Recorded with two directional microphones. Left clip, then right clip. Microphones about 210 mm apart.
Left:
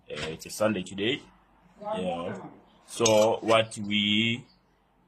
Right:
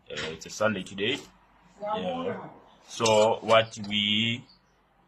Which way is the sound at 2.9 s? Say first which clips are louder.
Even; 25° left (ahead or behind).